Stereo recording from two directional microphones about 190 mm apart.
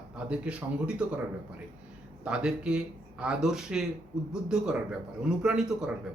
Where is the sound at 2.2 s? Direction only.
5° right (ahead or behind).